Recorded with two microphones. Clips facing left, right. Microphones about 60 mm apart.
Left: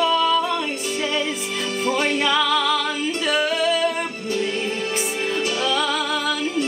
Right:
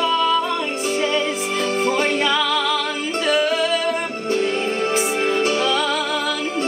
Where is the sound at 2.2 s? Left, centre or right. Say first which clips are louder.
Even; centre.